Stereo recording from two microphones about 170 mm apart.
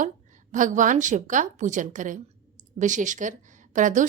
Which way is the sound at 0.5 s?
50° right (ahead or behind).